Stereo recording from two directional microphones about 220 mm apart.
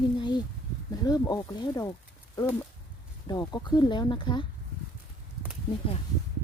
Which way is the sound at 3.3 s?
20° left (ahead or behind).